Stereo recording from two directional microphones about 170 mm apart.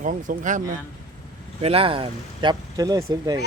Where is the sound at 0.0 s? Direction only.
50° right (ahead or behind).